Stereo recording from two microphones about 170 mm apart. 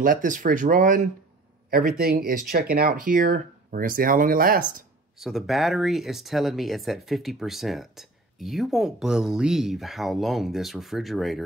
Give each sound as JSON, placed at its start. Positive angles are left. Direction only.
{"t": 0.0, "sound": "speech", "side_deg": -55}
{"t": 5.2, "sound": "speech", "side_deg": 0}